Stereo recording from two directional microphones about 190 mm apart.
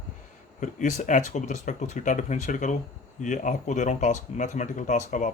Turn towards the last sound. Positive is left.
turn(degrees=40)  # may be behind; listen again after turning